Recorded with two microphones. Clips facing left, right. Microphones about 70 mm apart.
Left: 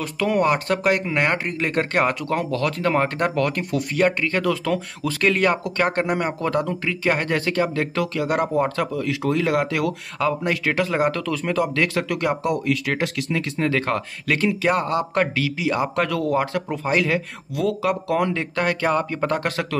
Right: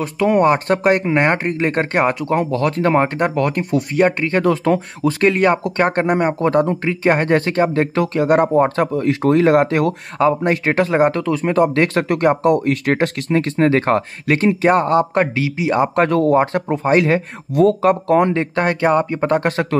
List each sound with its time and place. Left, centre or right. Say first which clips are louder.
0.0 s speech: right 6 dB; right